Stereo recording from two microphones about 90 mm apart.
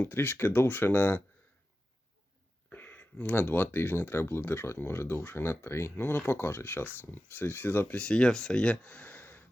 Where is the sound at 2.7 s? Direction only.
20° left (ahead or behind).